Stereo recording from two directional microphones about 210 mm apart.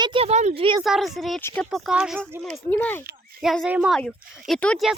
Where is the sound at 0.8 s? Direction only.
Centre (ahead or behind).